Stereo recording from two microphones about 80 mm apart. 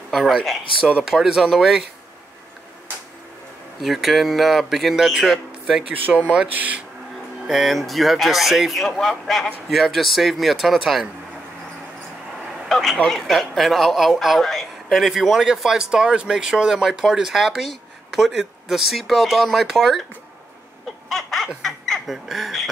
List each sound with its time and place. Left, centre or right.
0.1 s a man's voice: centre
3.8 s a man's voice: centre
6.3 s speech: centre
7.4 s a man's voice: centre
12.6 s a man's voice: centre
21.1 s a sound: centre
21.6 s speech: centre